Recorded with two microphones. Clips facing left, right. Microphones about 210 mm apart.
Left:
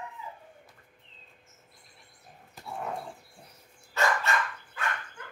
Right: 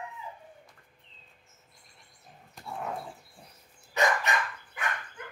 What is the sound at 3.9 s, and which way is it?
Dog, 15° right (ahead or behind).